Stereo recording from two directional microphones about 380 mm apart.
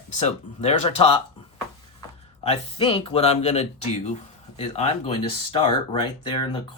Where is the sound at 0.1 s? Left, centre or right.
Centre.